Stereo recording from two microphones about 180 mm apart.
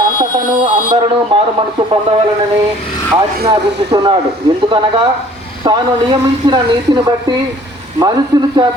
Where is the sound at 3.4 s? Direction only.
70° right (ahead or behind).